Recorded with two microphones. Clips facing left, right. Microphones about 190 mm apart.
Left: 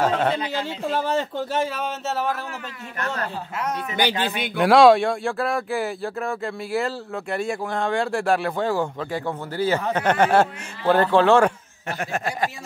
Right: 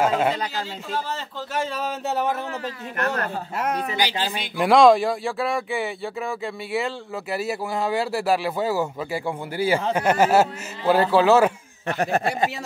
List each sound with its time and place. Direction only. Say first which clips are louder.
0.0 s a man's voice: even; 10° right (ahead or behind)
0.9 s speech: left 6 dB; 55° left (ahead or behind)
2.0 s a man's voice: right 2 dB; 20° right (ahead or behind)
3.0 s a woman's voice: right 2 dB; 55° right (ahead or behind)
3.9 s speech: left 2 dB; 55° left (ahead or behind)
4.6 s a man's voice: left 1 dB; centre (ahead or behind)
12.0 s speech: right 5 dB; 35° right (ahead or behind)